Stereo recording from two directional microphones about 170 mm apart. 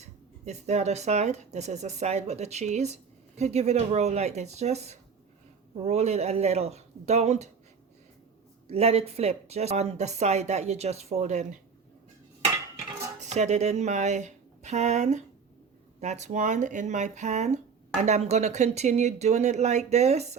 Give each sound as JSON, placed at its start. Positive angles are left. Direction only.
{"t": 0.0, "sound": "speech", "side_deg": -40}
{"t": 8.6, "sound": "speech", "side_deg": -35}
{"t": 13.1, "sound": "speech", "side_deg": -40}